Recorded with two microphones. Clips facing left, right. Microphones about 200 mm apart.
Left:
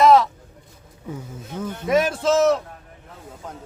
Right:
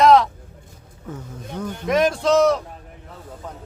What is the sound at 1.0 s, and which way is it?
Speech, 10° left (ahead or behind).